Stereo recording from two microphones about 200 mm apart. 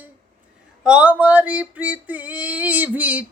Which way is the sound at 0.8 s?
5° right (ahead or behind).